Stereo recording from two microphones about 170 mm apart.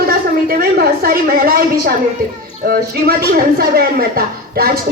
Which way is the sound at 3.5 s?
65° right (ahead or behind).